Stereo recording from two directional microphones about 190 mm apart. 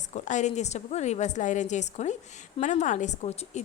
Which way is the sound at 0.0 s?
40° left (ahead or behind).